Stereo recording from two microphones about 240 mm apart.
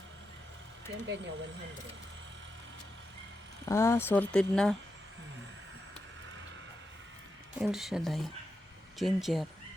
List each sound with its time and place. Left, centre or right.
1.0 s speech: right
3.7 s speech: centre
7.6 s speech: centre